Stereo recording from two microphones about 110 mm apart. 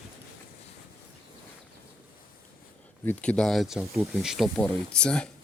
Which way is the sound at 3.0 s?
15° left (ahead or behind).